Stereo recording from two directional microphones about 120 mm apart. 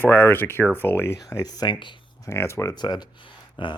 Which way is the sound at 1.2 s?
30° left (ahead or behind).